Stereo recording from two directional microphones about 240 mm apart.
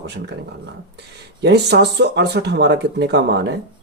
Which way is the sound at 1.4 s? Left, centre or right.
Right.